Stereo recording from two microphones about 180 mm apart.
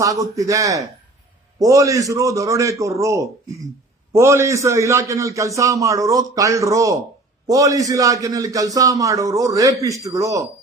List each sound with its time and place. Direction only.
0.0 s a man's voice: 20° right (ahead or behind)